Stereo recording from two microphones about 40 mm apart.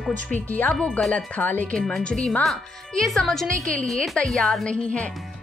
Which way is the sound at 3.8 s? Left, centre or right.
Centre.